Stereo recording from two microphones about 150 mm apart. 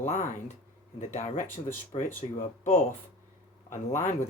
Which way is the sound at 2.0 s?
55° left (ahead or behind).